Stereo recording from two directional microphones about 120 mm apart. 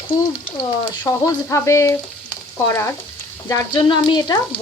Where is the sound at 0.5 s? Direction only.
30° left (ahead or behind).